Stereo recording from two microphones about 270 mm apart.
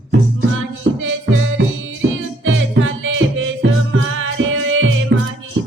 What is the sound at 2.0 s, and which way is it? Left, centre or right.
Music, right.